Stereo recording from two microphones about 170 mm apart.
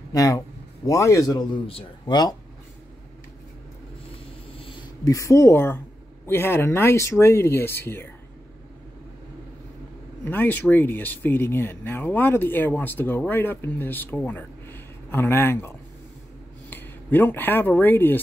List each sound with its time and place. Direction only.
0.1 s speech: 20° left (ahead or behind)
1.7 s speech: 30° left (ahead or behind)
5.0 s speech: 20° left (ahead or behind)
10.2 s speech: 10° left (ahead or behind)
16.7 s speech: 10° left (ahead or behind)